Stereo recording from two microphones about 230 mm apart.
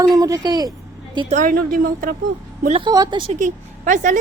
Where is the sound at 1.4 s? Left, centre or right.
Right.